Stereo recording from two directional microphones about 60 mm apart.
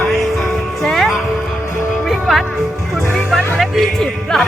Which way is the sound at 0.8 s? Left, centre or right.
Centre.